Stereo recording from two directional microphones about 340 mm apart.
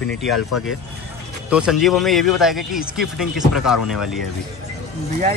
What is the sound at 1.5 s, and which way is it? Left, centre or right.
A man's voice, centre.